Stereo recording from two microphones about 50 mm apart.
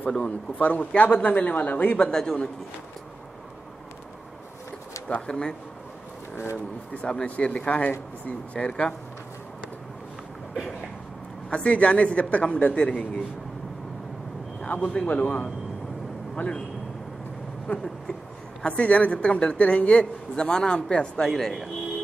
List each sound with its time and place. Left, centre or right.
0.2 s a man's voice: left
2.0 s speech: centre
5.2 s speech: centre
6.3 s speech: left
7.1 s a man's voice: left
11.5 s a man's voice: left
14.7 s a man's voice: left
17.7 s a man's voice: left
21.3 s speech: centre